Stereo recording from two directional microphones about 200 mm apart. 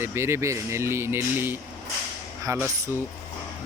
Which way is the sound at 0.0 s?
15° right (ahead or behind).